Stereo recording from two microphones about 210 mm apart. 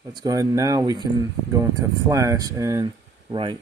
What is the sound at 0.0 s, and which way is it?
Speech, 20° right (ahead or behind).